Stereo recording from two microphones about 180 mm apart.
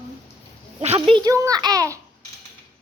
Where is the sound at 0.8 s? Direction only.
30° right (ahead or behind).